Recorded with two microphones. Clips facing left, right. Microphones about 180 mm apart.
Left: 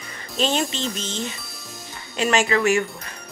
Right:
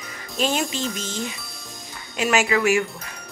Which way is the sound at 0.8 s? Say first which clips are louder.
Even; 25° left (ahead or behind).